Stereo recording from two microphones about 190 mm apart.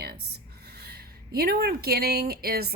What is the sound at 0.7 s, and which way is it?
Speech, 60° right (ahead or behind).